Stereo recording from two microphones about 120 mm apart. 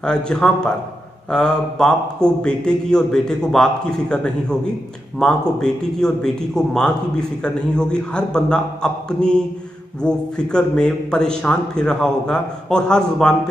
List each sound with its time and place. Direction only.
0.0 s a man's voice: 5° left (ahead or behind)